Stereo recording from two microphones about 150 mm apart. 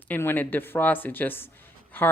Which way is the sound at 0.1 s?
15° left (ahead or behind).